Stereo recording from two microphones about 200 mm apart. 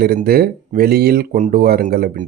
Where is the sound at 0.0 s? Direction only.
50° right (ahead or behind).